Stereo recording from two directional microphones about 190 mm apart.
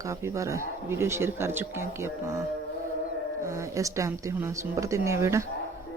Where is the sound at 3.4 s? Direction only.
15° right (ahead or behind).